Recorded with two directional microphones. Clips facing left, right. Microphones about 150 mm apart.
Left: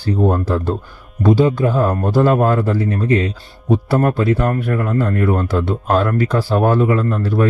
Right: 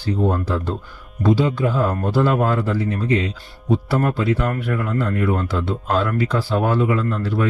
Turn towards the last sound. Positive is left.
turn(degrees=45)  # may be behind; listen again after turning